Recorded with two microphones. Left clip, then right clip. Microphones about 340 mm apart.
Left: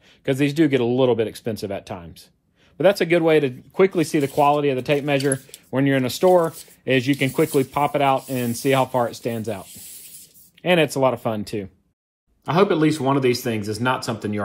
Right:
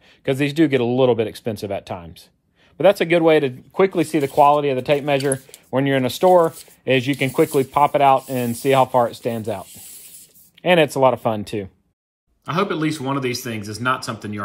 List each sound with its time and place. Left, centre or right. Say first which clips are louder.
0.2 s speech: right 1 dB; right
10.6 s speech: right 3 dB; right
12.4 s speech: left 3 dB; centre